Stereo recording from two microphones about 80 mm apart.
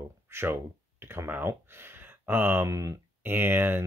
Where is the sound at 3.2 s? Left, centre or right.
Right.